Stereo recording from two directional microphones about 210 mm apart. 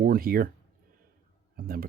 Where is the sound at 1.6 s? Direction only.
45° right (ahead or behind).